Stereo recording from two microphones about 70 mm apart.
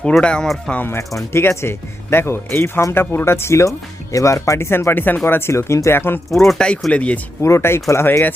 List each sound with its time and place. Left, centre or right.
0.2 s speech: centre
1.3 s speech: left
6.3 s speech: centre
6.9 s speech: centre
7.4 s speech: left